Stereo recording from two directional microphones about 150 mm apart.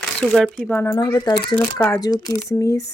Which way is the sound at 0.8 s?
20° left (ahead or behind).